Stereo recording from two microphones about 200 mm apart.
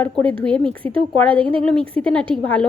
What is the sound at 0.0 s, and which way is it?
Speech, 10° left (ahead or behind).